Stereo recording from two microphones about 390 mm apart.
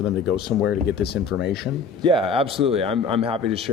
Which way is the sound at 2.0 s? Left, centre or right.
Centre.